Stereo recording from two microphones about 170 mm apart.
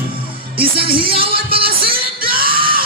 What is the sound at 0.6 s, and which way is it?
Music, 30° right (ahead or behind).